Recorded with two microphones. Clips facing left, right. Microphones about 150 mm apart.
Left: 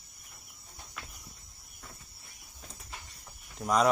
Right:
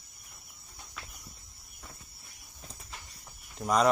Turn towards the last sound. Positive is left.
turn(degrees=0)  # may be behind; listen again after turning